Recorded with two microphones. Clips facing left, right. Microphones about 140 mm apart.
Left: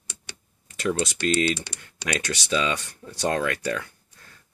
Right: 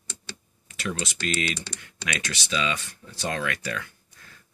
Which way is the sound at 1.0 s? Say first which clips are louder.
Left 6 dB; 35° left (ahead or behind).